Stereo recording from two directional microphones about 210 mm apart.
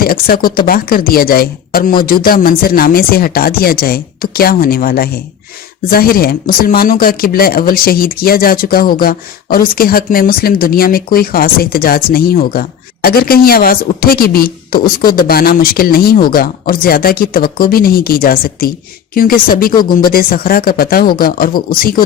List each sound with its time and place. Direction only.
0.0 s speech: 45° left (ahead or behind)